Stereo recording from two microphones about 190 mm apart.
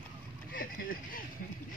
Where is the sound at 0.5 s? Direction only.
45° left (ahead or behind).